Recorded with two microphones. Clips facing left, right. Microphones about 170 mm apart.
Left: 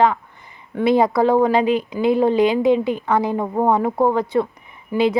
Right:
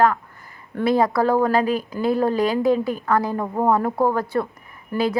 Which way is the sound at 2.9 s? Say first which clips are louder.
Left 1 dB; centre (ahead or behind).